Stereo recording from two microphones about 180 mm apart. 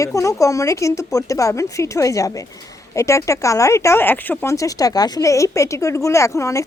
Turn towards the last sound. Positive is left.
turn(degrees=15)  # may be behind; listen again after turning